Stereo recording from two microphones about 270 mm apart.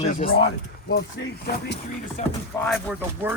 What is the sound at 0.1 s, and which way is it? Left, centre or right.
Speech, left.